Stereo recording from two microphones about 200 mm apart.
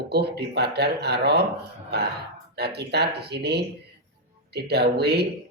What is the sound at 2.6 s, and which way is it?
Speech, 55° right (ahead or behind).